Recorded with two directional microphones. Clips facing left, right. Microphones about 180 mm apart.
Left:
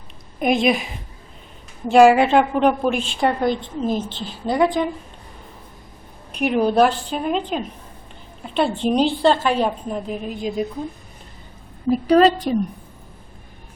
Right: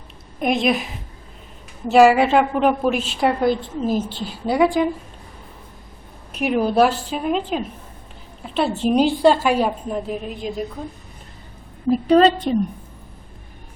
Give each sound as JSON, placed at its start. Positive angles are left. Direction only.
{"t": 0.3, "sound": "a woman's voice", "side_deg": 0}
{"t": 6.3, "sound": "a woman's voice", "side_deg": -5}
{"t": 11.9, "sound": "a woman's voice", "side_deg": 0}